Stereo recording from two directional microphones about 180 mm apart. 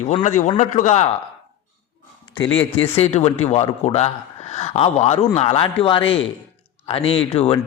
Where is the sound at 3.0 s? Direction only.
35° left (ahead or behind).